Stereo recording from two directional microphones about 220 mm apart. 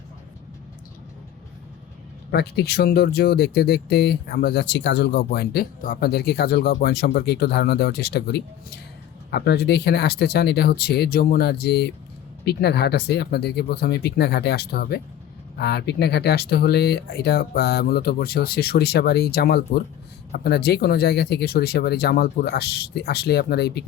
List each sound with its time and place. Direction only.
2.3 s speech: 45° left (ahead or behind)